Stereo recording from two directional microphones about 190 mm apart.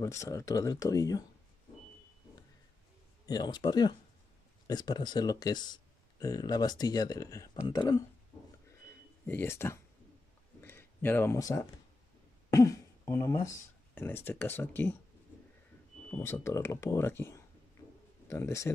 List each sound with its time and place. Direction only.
0.0 s speech: 15° left (ahead or behind)
3.3 s speech: 20° left (ahead or behind)
9.2 s speech: 10° left (ahead or behind)
10.6 s a sound: 10° left (ahead or behind)
12.4 s speech: 15° left (ahead or behind)
16.1 s speech: 15° left (ahead or behind)